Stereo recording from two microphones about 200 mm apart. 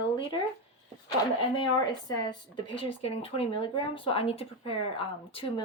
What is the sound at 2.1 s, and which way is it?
Speech, 25° left (ahead or behind).